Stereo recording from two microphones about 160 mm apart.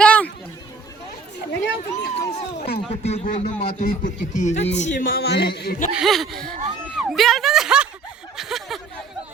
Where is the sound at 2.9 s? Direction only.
40° left (ahead or behind).